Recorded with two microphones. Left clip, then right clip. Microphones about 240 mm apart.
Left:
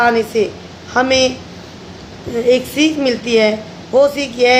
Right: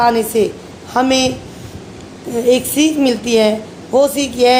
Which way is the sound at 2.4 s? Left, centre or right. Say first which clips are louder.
Even; right.